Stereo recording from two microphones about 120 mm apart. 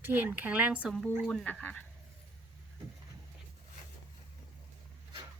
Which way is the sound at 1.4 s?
15° left (ahead or behind).